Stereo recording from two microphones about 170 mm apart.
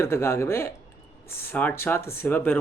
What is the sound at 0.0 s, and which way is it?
Speech, 15° left (ahead or behind).